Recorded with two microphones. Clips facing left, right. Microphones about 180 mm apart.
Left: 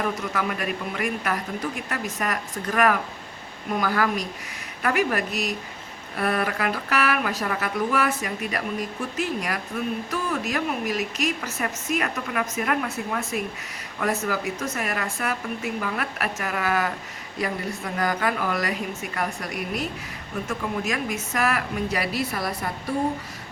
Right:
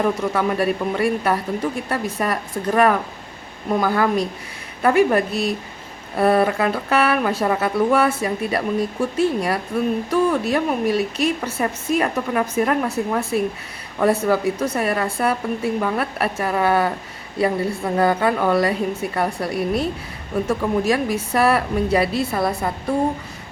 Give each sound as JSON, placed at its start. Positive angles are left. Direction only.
{"t": 0.2, "sound": "speech", "side_deg": -30}